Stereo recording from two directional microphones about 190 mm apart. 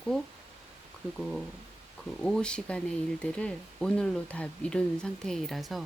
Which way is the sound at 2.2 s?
5° left (ahead or behind).